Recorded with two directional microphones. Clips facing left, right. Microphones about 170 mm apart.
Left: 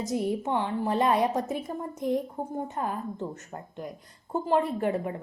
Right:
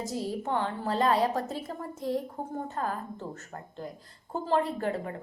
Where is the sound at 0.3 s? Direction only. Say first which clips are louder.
Left 3 dB; 20° left (ahead or behind).